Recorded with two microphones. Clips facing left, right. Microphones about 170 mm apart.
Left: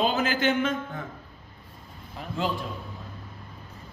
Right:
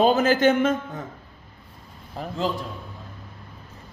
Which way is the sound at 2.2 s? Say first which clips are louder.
Right 6 dB; 40° right (ahead or behind).